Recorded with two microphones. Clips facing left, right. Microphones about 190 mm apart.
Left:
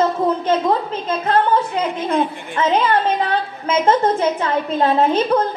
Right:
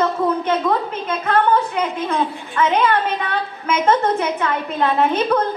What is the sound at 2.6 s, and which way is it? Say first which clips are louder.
A woman's voice: even; 30° left (ahead or behind).